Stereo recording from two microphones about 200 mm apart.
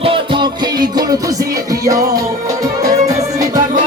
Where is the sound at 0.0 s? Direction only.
25° right (ahead or behind).